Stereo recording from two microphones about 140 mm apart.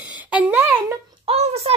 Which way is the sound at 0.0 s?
10° right (ahead or behind).